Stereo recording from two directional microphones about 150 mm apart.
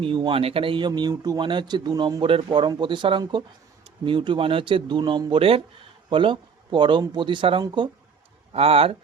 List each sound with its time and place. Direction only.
0.0 s speech: 35° right (ahead or behind)